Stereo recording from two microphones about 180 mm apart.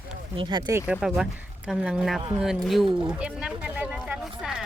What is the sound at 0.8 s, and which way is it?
Speech, 5° right (ahead or behind).